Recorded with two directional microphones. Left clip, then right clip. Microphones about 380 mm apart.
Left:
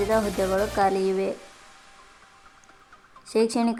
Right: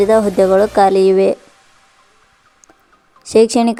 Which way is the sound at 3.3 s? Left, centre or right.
Centre.